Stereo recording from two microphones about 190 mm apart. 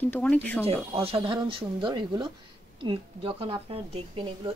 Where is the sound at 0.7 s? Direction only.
30° right (ahead or behind).